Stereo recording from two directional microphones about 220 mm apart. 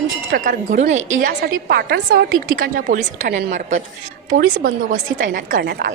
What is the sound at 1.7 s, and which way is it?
A woman's voice, 45° right (ahead or behind).